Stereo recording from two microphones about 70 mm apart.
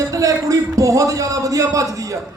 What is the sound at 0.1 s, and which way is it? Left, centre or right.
A man's voice, right.